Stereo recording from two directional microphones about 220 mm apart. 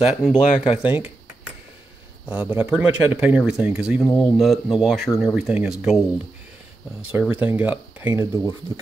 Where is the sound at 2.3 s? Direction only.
5° right (ahead or behind).